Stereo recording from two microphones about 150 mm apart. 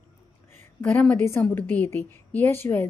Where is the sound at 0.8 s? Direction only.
10° left (ahead or behind).